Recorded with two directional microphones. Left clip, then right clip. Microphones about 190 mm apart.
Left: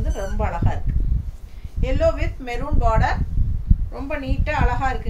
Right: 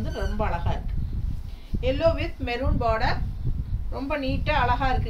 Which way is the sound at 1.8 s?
10° left (ahead or behind).